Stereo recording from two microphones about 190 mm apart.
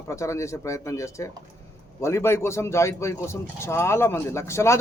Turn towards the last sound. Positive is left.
turn(degrees=15)  # may be behind; listen again after turning